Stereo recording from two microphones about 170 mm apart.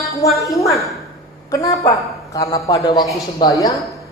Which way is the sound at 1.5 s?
20° left (ahead or behind).